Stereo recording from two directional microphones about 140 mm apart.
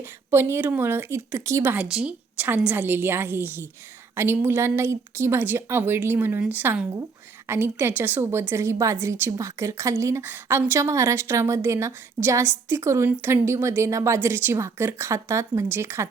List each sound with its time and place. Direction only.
0.0 s a woman's voice: 20° right (ahead or behind)